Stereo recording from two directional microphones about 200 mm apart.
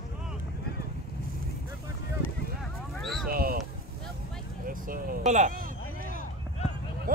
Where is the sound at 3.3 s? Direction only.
45° right (ahead or behind).